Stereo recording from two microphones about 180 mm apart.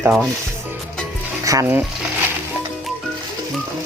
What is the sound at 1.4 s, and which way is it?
Speech, 15° right (ahead or behind).